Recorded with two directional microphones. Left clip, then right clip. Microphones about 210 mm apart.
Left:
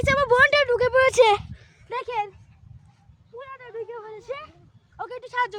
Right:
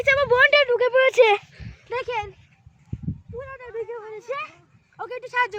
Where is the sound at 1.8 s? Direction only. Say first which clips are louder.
Right 1 dB; 25° left (ahead or behind).